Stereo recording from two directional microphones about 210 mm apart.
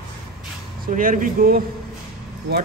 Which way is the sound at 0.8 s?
40° right (ahead or behind).